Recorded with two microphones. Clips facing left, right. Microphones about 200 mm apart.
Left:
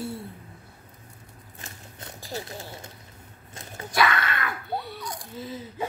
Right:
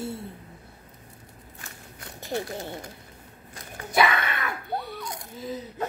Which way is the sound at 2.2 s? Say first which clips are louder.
Right 5 dB; 20° right (ahead or behind).